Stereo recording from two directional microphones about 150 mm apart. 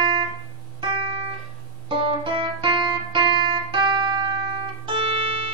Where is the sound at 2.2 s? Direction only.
35° right (ahead or behind).